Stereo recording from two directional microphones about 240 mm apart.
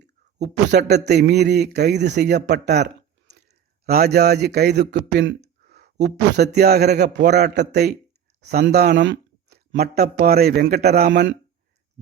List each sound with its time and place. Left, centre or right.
0.0 s a man's voice: right